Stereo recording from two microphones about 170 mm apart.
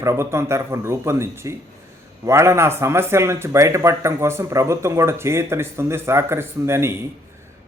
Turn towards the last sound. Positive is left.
turn(degrees=-15)  # may be behind; listen again after turning